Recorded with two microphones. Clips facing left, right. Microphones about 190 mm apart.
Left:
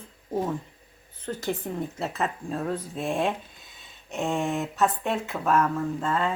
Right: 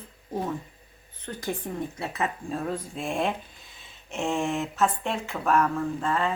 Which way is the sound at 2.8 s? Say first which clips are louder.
Left 2 dB; centre (ahead or behind).